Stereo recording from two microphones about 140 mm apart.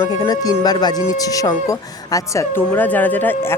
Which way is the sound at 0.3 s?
30° left (ahead or behind).